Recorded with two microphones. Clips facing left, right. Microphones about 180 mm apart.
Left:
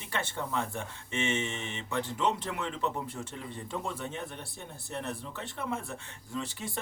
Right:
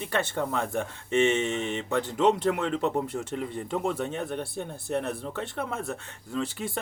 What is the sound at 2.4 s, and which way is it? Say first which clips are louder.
Speech: right 8 dB; 60° right (ahead or behind).